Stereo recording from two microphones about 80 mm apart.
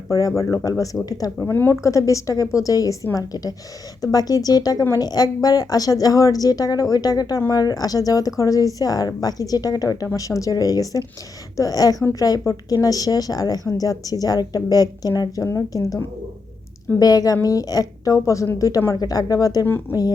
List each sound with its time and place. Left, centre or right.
0.1 s a woman's voice: left
1.5 s a woman's voice: left
17.0 s a woman's voice: left